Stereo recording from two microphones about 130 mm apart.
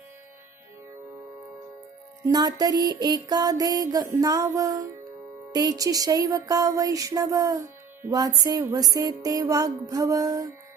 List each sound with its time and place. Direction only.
2.2 s music: 30° right (ahead or behind)